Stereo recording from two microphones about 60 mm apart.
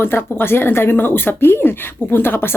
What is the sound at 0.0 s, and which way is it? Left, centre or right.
Speech, left.